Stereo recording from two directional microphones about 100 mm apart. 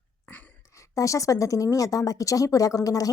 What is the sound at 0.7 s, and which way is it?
A woman's voice, 30° left (ahead or behind).